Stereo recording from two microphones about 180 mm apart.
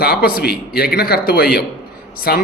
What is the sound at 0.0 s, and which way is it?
Speech, 60° left (ahead or behind).